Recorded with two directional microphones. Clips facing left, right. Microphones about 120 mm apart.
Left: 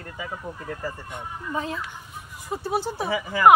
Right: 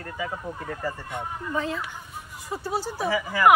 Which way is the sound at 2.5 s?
25° left (ahead or behind).